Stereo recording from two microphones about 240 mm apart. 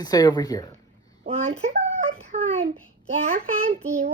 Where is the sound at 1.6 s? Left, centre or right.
Right.